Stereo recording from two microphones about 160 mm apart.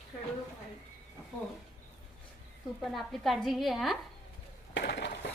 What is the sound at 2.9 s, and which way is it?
A woman's voice, centre (ahead or behind).